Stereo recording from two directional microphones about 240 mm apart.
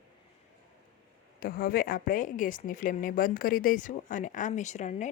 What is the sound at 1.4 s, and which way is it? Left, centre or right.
A woman's voice, left.